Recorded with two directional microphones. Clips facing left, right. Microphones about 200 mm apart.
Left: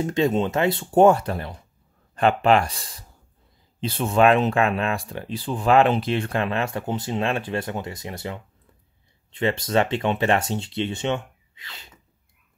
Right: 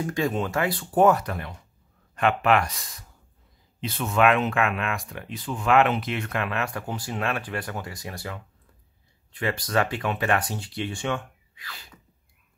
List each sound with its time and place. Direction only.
0.0 s speech: 25° left (ahead or behind)